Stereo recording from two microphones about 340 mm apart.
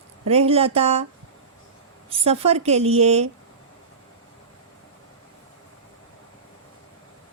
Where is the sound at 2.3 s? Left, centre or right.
Centre.